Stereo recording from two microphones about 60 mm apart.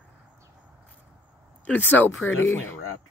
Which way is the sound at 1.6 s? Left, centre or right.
Left.